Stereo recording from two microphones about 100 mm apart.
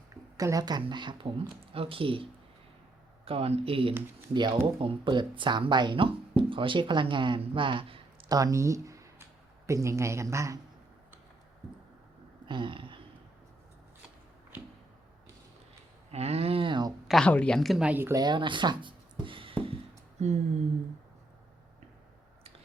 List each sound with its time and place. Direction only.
0.3 s speech: 35° right (ahead or behind)
0.8 s speech: 50° right (ahead or behind)
1.7 s speech: 65° right (ahead or behind)
3.2 s speech: 80° right; by 8.3 s 65° right (ahead or behind)
8.3 s speech: 35° right (ahead or behind)
12.5 s speech: 55° right (ahead or behind)
16.1 s speech: 90° right; by 16.9 s 50° right (ahead or behind)
17.1 s a woman's voice: 10° left (ahead or behind)
17.8 s speech: 20° right (ahead or behind)
18.1 s speech: 45° right (ahead or behind); by 19.7 s 60° right (ahead or behind)